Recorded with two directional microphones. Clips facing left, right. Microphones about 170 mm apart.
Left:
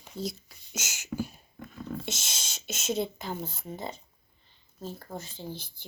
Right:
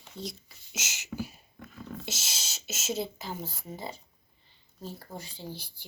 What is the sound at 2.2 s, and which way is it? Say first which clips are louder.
Beatboxing: left 1 dB; 50° left (ahead or behind).